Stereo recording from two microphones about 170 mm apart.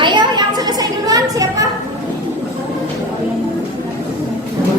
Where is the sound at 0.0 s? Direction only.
25° right (ahead or behind).